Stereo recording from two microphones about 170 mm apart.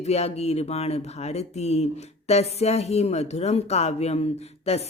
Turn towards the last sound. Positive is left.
turn(degrees=40)  # may be behind; listen again after turning